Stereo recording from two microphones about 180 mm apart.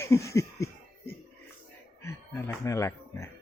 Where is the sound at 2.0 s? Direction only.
15° left (ahead or behind).